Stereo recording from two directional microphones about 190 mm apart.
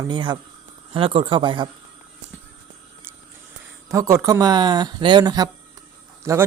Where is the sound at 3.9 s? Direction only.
15° right (ahead or behind).